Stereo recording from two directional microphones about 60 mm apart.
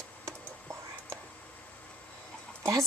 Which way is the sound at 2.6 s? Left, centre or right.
Right.